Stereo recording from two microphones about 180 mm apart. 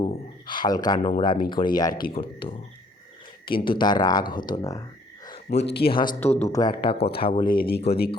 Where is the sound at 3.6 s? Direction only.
25° left (ahead or behind).